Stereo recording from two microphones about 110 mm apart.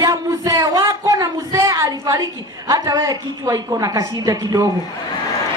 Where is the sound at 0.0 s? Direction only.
30° right (ahead or behind).